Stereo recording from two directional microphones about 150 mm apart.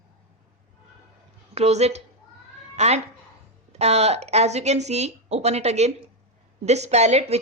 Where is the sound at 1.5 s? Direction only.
45° right (ahead or behind).